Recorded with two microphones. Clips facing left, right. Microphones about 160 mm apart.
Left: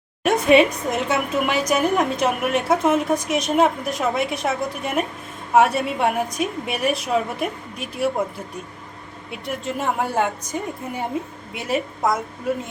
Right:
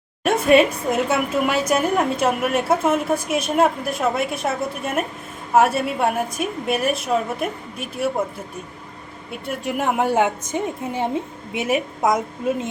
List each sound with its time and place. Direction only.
0.4 s a woman's voice: centre (ahead or behind)
9.6 s a woman's voice: 20° right (ahead or behind)